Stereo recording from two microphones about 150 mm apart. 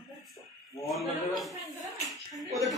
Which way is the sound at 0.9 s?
Centre (ahead or behind).